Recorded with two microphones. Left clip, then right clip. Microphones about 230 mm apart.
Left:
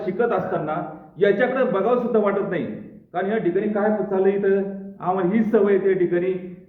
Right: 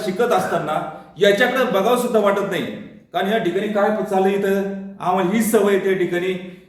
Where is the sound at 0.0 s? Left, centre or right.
Centre.